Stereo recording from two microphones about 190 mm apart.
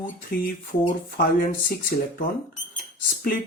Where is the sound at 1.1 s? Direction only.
50° left (ahead or behind).